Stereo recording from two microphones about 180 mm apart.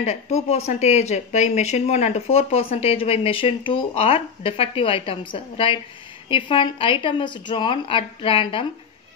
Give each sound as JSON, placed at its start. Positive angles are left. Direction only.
{"t": 0.0, "sound": "a woman's voice", "side_deg": 35}